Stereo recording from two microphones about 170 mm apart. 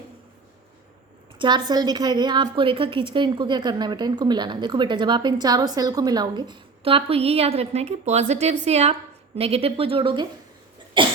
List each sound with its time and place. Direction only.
1.4 s a woman's voice: 25° right (ahead or behind)